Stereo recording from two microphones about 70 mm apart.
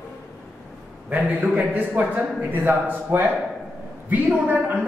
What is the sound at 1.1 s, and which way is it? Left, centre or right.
A woman's voice, right.